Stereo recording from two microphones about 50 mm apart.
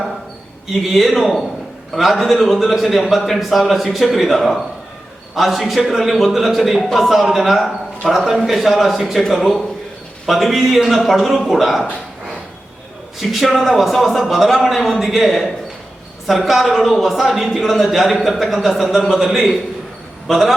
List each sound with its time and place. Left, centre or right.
0.7 s a man's voice: centre
13.1 s a man's voice: centre